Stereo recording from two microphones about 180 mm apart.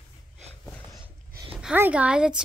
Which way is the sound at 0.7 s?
10° left (ahead or behind).